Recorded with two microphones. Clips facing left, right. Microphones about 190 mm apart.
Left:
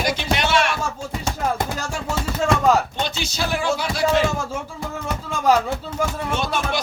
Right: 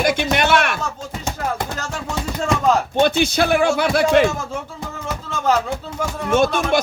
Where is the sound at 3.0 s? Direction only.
55° right (ahead or behind).